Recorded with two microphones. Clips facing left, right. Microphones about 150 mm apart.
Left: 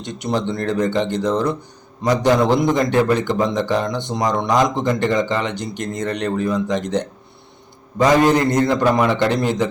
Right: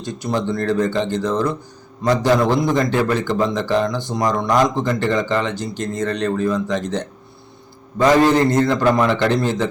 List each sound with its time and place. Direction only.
0.0 s a man's voice: 20° left (ahead or behind)